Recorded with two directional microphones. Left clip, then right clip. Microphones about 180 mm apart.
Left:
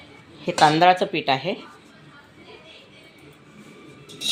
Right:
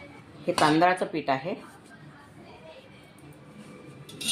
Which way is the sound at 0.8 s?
65° left (ahead or behind).